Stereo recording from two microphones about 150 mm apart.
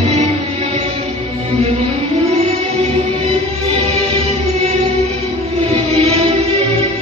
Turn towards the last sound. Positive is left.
turn(degrees=-40)  # may be behind; listen again after turning